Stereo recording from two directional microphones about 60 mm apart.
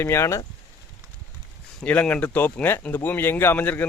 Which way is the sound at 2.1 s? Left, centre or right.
Left.